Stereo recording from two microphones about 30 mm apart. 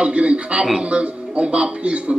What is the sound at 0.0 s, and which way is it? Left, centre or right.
A man's voice, right.